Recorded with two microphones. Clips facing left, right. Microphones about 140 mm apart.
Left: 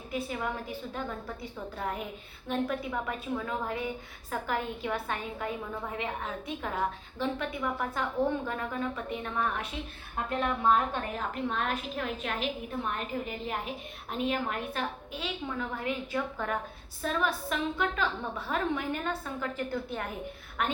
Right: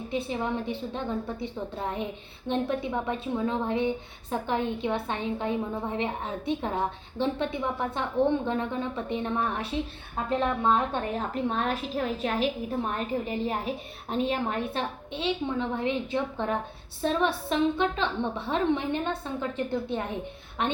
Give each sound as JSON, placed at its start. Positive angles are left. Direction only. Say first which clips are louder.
{"t": 0.1, "sound": "a woman's voice", "louder": "right 4 dB", "side_deg": -25}